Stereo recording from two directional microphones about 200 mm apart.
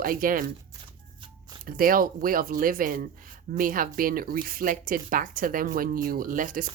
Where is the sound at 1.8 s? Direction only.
45° right (ahead or behind).